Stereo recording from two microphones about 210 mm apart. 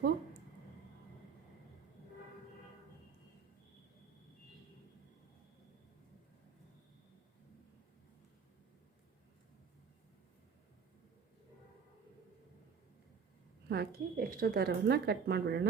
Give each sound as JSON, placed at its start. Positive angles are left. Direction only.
{"t": 13.7, "sound": "speech", "side_deg": -45}